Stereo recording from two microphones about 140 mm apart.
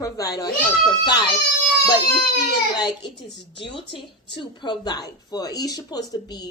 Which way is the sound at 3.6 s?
35° left (ahead or behind).